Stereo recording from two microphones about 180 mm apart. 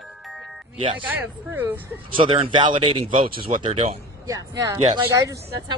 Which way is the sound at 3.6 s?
35° right (ahead or behind).